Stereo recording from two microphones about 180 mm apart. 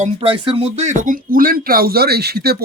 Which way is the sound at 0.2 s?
30° right (ahead or behind).